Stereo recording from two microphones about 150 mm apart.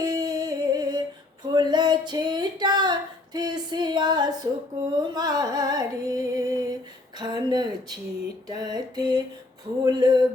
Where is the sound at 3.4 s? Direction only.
30° right (ahead or behind).